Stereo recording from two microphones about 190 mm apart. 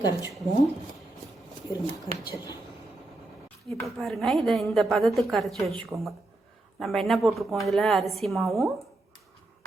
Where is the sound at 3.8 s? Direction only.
Centre (ahead or behind).